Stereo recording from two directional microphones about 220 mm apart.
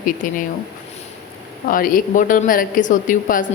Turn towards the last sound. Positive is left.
turn(degrees=35)  # may be behind; listen again after turning